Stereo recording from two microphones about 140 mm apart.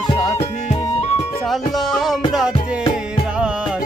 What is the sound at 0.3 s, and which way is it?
Music, 50° left (ahead or behind).